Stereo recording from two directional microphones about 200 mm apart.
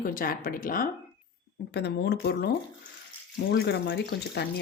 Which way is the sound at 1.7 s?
55° left (ahead or behind).